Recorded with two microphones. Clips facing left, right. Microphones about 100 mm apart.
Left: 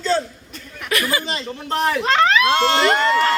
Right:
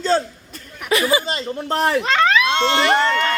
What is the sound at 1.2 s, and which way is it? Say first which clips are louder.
Speech: right 2 dB; 35° right (ahead or behind).